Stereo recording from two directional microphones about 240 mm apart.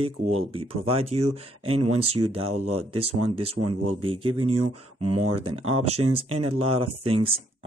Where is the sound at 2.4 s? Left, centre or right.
Right.